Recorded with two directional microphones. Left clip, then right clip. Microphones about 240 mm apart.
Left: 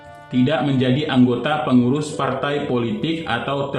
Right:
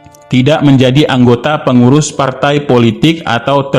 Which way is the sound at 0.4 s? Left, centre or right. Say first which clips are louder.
Right 11 dB; right.